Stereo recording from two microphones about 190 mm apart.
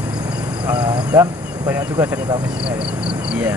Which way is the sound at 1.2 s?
10° right (ahead or behind).